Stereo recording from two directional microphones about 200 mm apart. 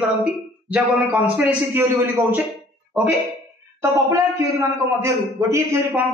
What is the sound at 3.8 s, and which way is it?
A man's voice, 15° right (ahead or behind).